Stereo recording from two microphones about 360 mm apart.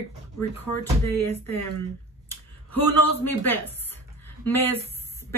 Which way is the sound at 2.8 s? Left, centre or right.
Centre.